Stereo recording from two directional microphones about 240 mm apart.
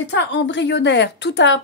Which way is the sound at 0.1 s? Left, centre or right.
Left.